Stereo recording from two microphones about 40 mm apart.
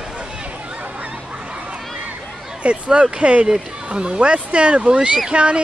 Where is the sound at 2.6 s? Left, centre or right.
Right.